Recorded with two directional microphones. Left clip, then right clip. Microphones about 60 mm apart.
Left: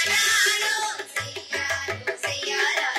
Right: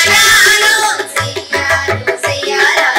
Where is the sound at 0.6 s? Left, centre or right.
Right.